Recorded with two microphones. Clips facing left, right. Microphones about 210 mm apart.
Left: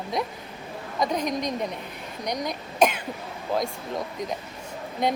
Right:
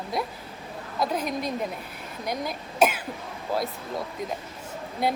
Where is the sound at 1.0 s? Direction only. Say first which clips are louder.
Left 2 dB; 5° right (ahead or behind).